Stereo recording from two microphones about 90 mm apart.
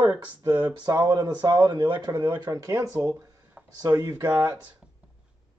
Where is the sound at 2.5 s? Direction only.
40° right (ahead or behind).